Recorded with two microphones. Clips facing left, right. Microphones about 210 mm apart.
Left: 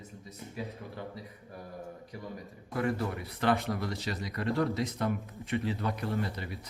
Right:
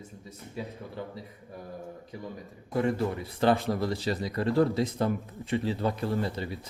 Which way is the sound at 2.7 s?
25° right (ahead or behind).